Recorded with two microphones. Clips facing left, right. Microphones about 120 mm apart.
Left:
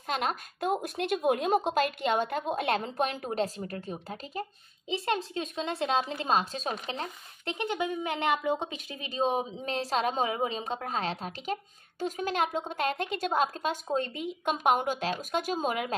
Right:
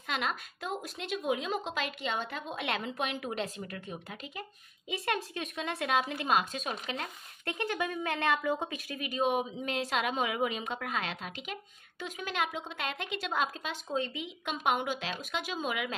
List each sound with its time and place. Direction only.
0.0 s a woman's voice: 40° left (ahead or behind)